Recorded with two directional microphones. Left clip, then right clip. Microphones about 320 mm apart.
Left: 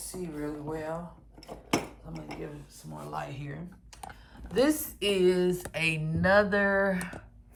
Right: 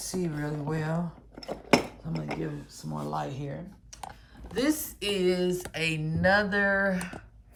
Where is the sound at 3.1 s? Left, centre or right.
Centre.